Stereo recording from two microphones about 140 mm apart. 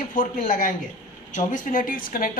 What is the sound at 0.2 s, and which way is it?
A woman's voice, 70° left (ahead or behind).